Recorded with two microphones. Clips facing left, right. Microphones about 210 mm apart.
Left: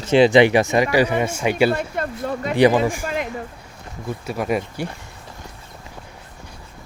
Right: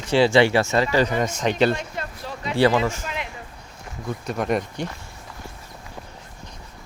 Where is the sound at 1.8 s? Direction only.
55° left (ahead or behind).